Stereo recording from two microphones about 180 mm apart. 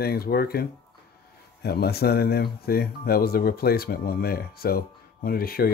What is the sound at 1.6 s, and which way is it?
Speech, 60° left (ahead or behind).